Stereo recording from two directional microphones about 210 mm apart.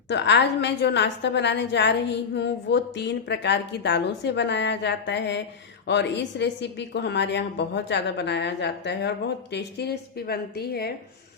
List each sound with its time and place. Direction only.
0.1 s a woman's voice: 55° left (ahead or behind)